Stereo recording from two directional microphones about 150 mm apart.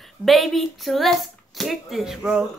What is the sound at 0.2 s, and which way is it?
Speech, centre (ahead or behind).